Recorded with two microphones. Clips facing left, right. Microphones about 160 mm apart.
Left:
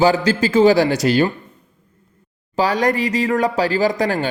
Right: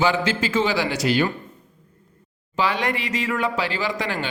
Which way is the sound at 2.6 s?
40° left (ahead or behind).